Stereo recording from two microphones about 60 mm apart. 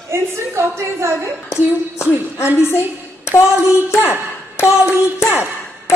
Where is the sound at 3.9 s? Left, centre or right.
Left.